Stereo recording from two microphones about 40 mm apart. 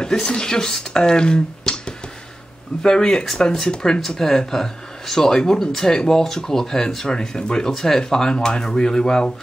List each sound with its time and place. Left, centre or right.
0.0 s speech: centre